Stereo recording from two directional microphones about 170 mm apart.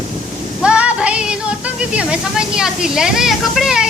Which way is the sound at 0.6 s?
5° right (ahead or behind).